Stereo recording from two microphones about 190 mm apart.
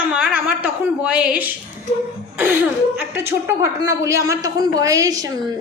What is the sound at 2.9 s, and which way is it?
A woman's voice, 10° right (ahead or behind).